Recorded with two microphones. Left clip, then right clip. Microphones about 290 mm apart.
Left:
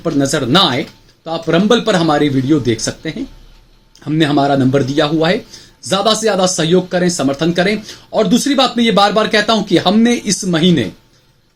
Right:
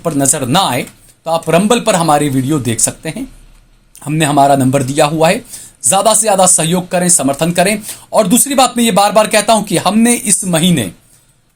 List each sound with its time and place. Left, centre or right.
0.0 s speech: right